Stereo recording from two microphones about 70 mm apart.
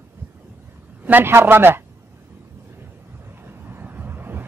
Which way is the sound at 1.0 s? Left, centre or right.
Right.